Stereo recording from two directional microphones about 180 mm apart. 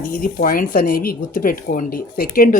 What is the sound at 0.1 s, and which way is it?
Speech, 50° left (ahead or behind).